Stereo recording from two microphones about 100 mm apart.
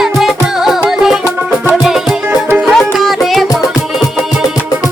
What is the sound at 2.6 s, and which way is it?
Music, centre (ahead or behind).